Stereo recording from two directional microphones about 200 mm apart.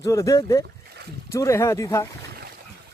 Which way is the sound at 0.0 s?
15° left (ahead or behind).